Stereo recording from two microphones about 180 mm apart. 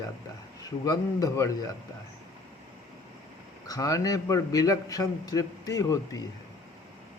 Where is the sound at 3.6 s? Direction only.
20° left (ahead or behind).